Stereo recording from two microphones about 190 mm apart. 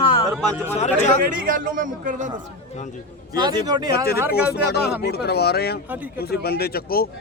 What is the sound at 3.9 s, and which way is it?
Speech, 55° left (ahead or behind).